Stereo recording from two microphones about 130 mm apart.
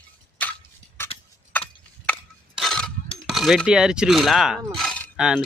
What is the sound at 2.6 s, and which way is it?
Coin, 5° left (ahead or behind).